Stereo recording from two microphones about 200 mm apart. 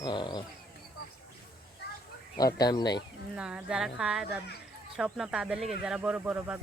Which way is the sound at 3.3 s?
5° right (ahead or behind).